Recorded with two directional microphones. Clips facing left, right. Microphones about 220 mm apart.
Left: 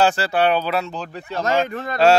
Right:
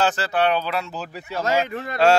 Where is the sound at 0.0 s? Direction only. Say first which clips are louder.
Left 3 dB; 10° left (ahead or behind).